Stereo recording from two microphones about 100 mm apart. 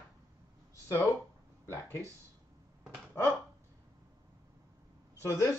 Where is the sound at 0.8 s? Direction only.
30° left (ahead or behind).